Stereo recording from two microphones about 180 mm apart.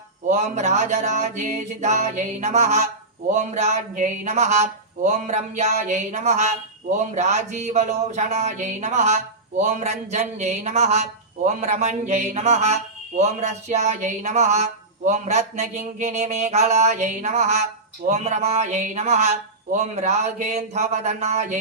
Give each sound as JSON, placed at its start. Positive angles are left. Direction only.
{"t": 0.3, "sound": "speech", "side_deg": -40}